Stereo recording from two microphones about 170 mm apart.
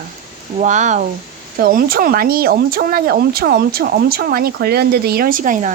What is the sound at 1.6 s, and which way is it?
Speech, 60° right (ahead or behind).